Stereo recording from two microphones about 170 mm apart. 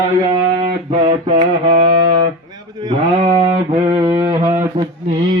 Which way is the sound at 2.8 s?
30° right (ahead or behind).